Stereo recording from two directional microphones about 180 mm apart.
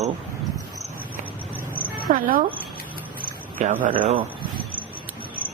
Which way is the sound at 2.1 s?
50° right (ahead or behind).